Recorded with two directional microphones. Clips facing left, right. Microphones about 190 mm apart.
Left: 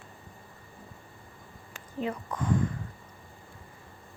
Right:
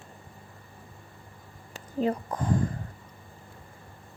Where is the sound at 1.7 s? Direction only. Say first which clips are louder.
Right 6 dB; 35° right (ahead or behind).